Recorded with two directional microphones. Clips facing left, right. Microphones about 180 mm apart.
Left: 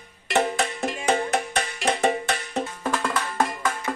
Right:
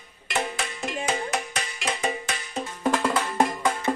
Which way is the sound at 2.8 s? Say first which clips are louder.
Right 6 dB; 15° right (ahead or behind).